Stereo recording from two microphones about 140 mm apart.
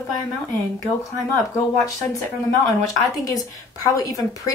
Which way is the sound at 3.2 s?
25° left (ahead or behind).